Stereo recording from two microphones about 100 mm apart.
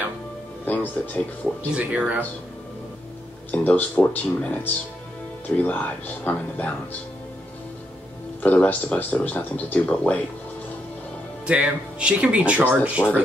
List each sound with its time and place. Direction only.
0.7 s speech: 15° left (ahead or behind)
1.7 s speech: 10° right (ahead or behind)
3.5 s speech: 15° left (ahead or behind)
5.6 s speech: 15° left (ahead or behind)
8.4 s speech: 15° left (ahead or behind)
11.4 s speech: 10° right (ahead or behind)